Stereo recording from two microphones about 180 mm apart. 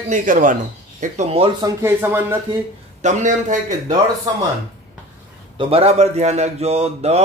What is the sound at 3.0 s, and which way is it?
Speech, 40° right (ahead or behind).